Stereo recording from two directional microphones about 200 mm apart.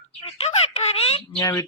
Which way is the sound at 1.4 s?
15° left (ahead or behind).